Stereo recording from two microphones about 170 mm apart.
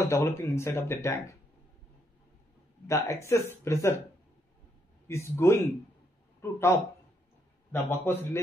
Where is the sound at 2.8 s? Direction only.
15° left (ahead or behind).